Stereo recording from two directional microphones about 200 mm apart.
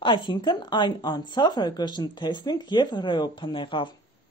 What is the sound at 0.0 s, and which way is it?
Speech, 25° left (ahead or behind).